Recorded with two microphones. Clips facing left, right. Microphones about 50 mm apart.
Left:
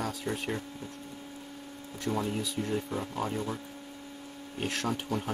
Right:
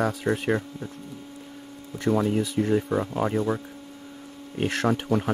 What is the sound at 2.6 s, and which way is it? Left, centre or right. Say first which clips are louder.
Speech: right 10 dB; right.